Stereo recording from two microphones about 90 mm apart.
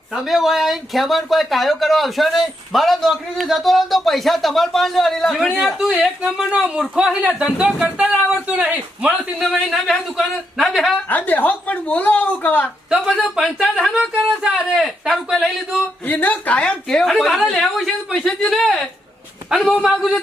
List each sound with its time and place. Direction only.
0.1 s speech: centre (ahead or behind)
9.4 s speech: centre (ahead or behind)
11.1 s speech: 20° left (ahead or behind)
12.9 s speech: 10° right (ahead or behind)
16.0 s a woman's voice: 20° left (ahead or behind); by 20.2 s centre (ahead or behind)